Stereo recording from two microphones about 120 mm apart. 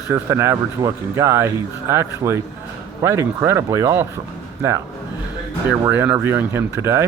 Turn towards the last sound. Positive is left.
turn(degrees=-20)  # may be behind; listen again after turning